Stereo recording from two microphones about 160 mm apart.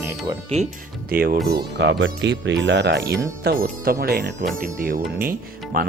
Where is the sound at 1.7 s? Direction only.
90° right.